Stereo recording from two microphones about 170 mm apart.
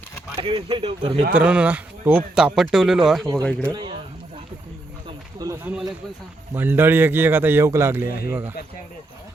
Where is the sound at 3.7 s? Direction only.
25° right (ahead or behind).